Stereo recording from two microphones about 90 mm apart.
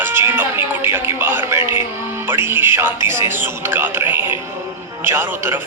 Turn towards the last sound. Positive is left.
turn(degrees=-30)  # may be behind; listen again after turning